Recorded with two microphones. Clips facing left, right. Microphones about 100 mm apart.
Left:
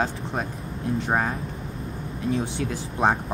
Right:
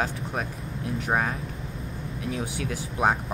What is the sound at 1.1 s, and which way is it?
Speech, 10° left (ahead or behind).